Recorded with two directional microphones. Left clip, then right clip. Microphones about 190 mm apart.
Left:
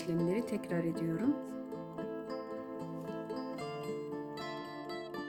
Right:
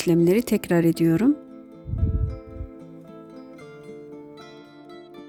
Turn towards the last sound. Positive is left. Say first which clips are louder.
# left 1 dB
turn(degrees=65)  # may be behind; listen again after turning